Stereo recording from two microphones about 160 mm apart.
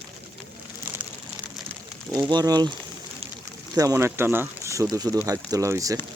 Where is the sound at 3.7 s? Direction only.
20° right (ahead or behind).